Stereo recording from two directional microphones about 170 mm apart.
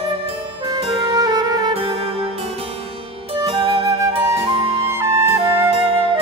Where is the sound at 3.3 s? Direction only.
30° right (ahead or behind).